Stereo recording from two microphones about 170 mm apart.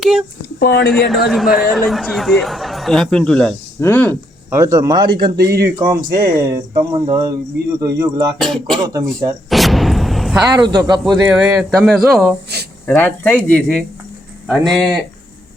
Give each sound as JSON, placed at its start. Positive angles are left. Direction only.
{"t": 0.0, "sound": "speech", "side_deg": -5}
{"t": 0.6, "sound": "speech", "side_deg": 80}
{"t": 0.9, "sound": "speech", "side_deg": 0}
{"t": 4.5, "sound": "speech", "side_deg": -20}
{"t": 8.4, "sound": "speech", "side_deg": 0}
{"t": 8.8, "sound": "speech", "side_deg": -20}
{"t": 9.5, "sound": "a sound", "side_deg": 0}
{"t": 10.5, "sound": "speech", "side_deg": -25}
{"t": 11.0, "sound": "speech", "side_deg": -5}